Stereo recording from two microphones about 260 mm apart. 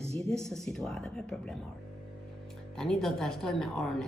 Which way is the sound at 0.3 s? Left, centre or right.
Centre.